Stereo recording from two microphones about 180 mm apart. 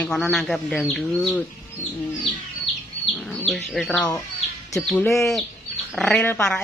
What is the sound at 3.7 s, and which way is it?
Speech, 5° left (ahead or behind).